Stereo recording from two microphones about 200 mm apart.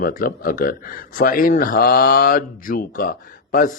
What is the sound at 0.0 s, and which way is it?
Speech, 45° left (ahead or behind).